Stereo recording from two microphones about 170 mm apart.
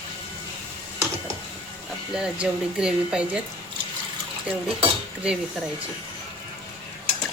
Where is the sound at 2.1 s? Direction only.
5° right (ahead or behind).